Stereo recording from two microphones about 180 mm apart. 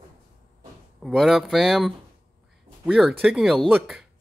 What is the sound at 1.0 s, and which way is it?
Speech, centre (ahead or behind).